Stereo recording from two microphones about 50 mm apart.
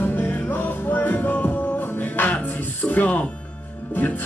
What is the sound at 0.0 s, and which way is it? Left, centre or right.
Music, left.